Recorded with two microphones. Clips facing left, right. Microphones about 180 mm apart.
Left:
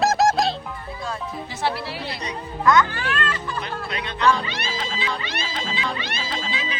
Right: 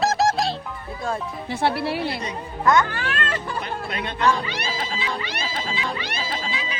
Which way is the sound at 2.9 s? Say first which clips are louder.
Even; 50° right (ahead or behind).